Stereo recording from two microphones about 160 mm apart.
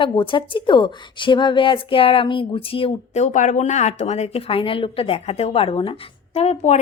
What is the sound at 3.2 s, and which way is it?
Speech, 50° left (ahead or behind).